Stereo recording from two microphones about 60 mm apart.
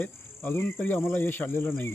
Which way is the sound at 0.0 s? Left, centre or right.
Left.